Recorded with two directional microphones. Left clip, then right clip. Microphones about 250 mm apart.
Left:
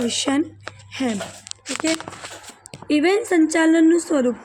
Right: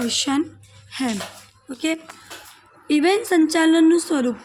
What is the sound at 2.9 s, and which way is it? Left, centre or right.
Speech, right.